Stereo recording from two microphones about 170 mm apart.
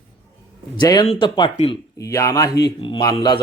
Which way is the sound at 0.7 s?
25° left (ahead or behind).